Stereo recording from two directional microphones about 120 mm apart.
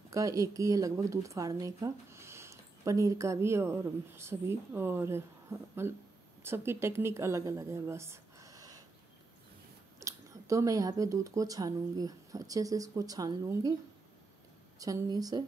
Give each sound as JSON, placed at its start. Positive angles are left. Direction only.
{"t": 0.1, "sound": "a woman's voice", "side_deg": -30}
{"t": 9.9, "sound": "a woman's voice", "side_deg": -25}
{"t": 14.8, "sound": "a woman's voice", "side_deg": -30}